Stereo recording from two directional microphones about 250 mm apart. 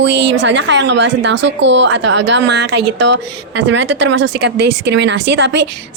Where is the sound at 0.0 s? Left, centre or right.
Right.